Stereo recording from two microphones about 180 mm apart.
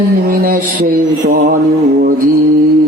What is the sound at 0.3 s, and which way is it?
Mantra, 50° right (ahead or behind).